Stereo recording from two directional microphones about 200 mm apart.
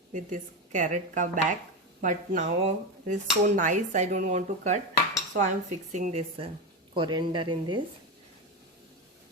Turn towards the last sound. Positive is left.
turn(degrees=-25)  # may be behind; listen again after turning